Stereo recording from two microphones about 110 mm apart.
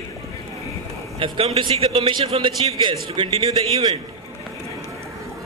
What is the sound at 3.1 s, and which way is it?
Speech, 50° right (ahead or behind).